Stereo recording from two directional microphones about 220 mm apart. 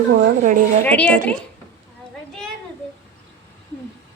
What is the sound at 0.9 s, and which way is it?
Speech, 5° left (ahead or behind).